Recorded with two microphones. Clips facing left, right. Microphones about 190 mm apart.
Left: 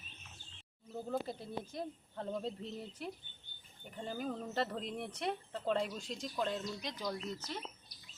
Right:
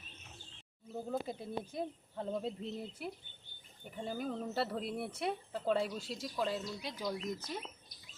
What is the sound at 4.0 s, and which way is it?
Speech, 5° right (ahead or behind).